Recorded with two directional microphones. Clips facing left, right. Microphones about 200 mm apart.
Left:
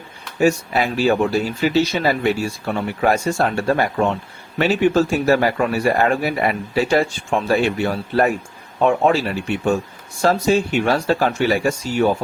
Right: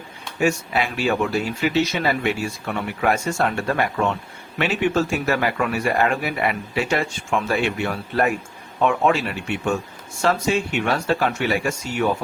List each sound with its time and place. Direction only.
0.3 s a man's voice: 35° left (ahead or behind)